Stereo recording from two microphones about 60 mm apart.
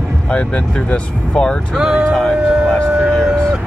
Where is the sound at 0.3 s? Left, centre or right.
Centre.